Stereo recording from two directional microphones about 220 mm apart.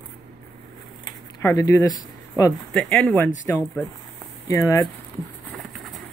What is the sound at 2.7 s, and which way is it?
Speech, 5° left (ahead or behind).